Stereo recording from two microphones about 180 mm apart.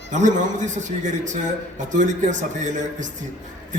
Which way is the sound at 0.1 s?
45° right (ahead or behind).